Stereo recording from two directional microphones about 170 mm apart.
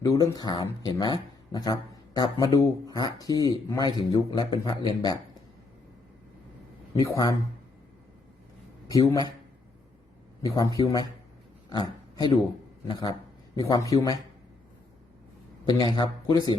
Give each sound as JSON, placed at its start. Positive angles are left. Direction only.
{"t": 0.0, "sound": "a man's voice", "side_deg": 20}
{"t": 6.9, "sound": "a man's voice", "side_deg": 20}
{"t": 8.9, "sound": "a man's voice", "side_deg": 20}
{"t": 10.4, "sound": "a man's voice", "side_deg": 20}
{"t": 15.6, "sound": "a man's voice", "side_deg": 25}